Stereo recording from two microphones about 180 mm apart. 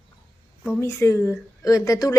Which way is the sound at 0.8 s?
15° left (ahead or behind).